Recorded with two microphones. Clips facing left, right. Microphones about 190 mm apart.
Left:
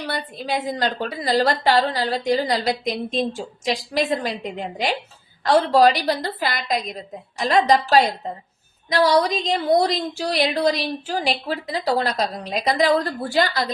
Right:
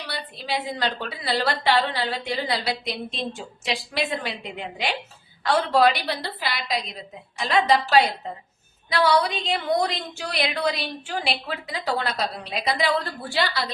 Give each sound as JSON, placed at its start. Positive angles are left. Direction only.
{"t": 0.1, "sound": "a woman's voice", "side_deg": 50}